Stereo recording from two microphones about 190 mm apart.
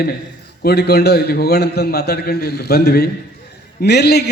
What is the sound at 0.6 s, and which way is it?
A man's voice, 55° left (ahead or behind).